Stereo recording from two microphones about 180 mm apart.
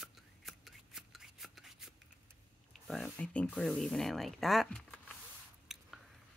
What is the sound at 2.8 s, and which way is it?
Speech, 5° left (ahead or behind).